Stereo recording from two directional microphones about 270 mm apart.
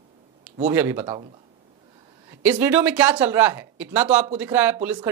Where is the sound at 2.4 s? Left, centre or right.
Centre.